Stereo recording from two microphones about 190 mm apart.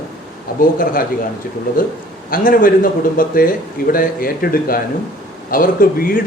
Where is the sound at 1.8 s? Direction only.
45° left (ahead or behind).